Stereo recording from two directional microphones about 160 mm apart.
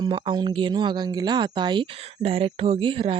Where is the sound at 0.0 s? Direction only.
30° right (ahead or behind).